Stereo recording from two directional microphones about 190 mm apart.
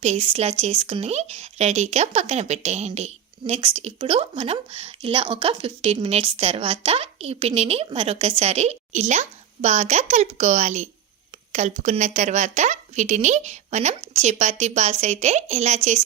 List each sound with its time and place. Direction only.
0.0 s speech: 35° right (ahead or behind)